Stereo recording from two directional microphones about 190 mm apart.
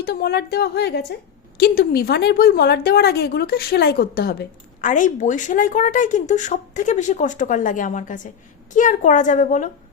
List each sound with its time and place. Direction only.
0.0 s a woman's voice: 55° left (ahead or behind); by 9.6 s 40° left (ahead or behind)